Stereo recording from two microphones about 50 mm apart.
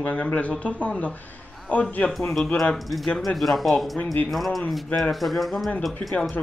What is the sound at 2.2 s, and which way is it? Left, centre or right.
Speech, centre.